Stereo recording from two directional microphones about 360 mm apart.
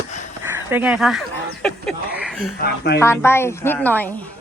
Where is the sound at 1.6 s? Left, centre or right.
Centre.